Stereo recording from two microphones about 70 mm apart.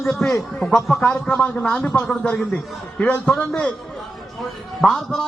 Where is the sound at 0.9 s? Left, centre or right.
Centre.